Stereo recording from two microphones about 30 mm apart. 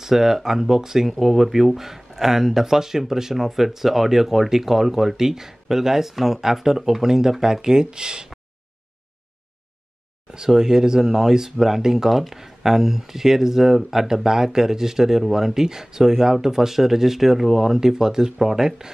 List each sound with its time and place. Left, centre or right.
0.0 s speech: centre
10.3 s speech: right
17.7 s speech: centre